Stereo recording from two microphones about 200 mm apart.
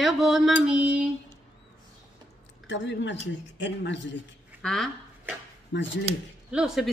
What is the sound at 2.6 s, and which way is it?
Speech, 65° left (ahead or behind).